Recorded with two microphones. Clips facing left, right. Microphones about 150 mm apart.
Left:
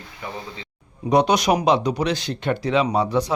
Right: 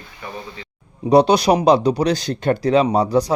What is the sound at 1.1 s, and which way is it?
Speech, 30° right (ahead or behind).